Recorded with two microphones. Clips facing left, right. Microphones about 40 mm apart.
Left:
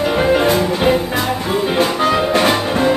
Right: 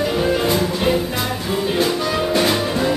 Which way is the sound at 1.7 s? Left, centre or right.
Left.